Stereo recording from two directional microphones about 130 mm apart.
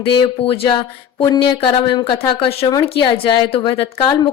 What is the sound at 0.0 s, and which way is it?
Speech, 40° left (ahead or behind).